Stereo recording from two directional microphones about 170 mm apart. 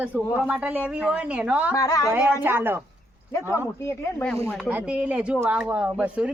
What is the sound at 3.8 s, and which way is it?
Speech, 15° left (ahead or behind).